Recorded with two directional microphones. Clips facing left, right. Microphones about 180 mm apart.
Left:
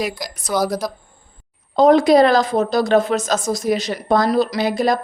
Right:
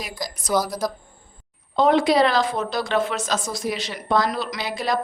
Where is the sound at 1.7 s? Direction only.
40° left (ahead or behind).